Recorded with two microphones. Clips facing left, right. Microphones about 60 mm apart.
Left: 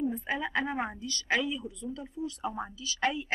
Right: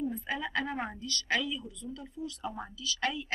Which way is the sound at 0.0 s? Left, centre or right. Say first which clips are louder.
Left 3 dB; left.